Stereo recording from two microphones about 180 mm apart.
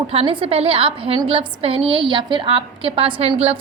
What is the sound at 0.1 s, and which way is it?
A woman's voice, 35° right (ahead or behind).